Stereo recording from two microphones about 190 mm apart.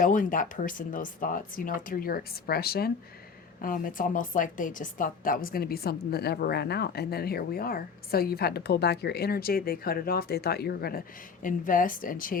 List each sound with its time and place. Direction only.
0.0 s a woman's voice: 45° left (ahead or behind)